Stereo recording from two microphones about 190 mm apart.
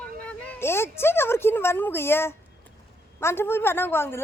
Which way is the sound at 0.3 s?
10° left (ahead or behind).